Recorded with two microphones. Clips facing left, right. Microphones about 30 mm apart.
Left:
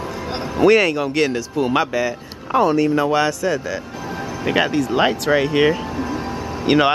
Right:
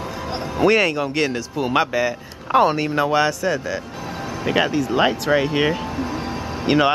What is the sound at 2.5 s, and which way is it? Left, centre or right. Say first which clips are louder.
Speech: left 1 dB; right.